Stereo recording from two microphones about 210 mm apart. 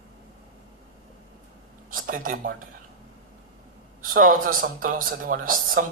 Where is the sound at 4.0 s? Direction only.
40° right (ahead or behind).